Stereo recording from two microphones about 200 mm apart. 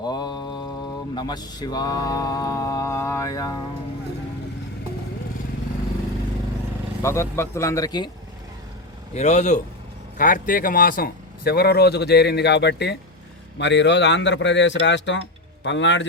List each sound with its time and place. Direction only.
0.0 s mantra: 20° left (ahead or behind)
7.0 s speech: 15° left (ahead or behind)
9.1 s a man's voice: 35° left (ahead or behind); by 16.0 s 65° left (ahead or behind)